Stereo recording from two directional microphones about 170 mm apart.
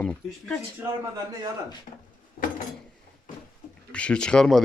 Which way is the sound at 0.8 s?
10° right (ahead or behind).